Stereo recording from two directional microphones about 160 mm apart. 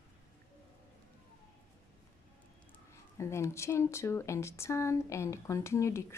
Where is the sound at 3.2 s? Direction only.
15° left (ahead or behind).